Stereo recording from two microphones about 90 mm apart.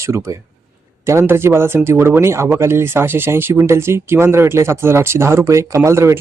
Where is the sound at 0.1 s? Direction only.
30° right (ahead or behind).